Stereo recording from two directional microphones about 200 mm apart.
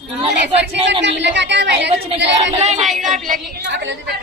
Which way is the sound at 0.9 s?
60° right (ahead or behind).